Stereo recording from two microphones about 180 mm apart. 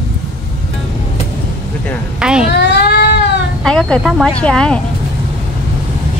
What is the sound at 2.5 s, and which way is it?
Cat, 70° left (ahead or behind).